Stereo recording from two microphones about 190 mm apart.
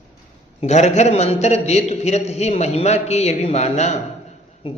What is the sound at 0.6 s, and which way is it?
A man's voice, 35° left (ahead or behind).